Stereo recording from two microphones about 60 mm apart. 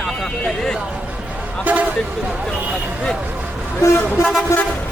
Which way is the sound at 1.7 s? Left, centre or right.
Right.